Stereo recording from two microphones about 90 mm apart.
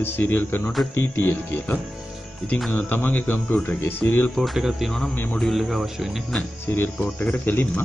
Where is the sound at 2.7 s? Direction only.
20° left (ahead or behind).